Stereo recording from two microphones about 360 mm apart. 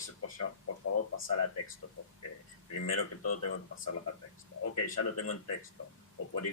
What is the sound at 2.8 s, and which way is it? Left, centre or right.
Speech, left.